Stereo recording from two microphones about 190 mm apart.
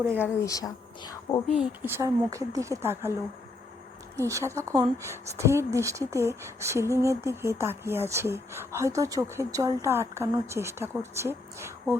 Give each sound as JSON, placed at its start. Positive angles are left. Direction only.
{"t": 0.1, "sound": "speech", "side_deg": 15}
{"t": 1.5, "sound": "speech", "side_deg": -5}
{"t": 4.2, "sound": "speech", "side_deg": -15}